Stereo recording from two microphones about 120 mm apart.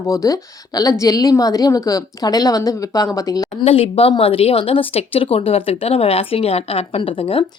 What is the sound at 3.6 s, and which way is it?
Speech, 55° left (ahead or behind).